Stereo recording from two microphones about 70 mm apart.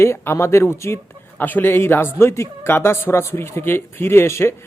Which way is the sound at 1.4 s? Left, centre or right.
Left.